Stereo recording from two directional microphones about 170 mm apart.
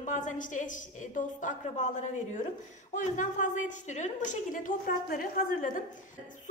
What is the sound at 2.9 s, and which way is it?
A woman's voice, 45° left (ahead or behind).